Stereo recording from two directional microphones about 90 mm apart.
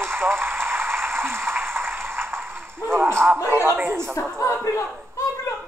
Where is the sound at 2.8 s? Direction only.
25° right (ahead or behind).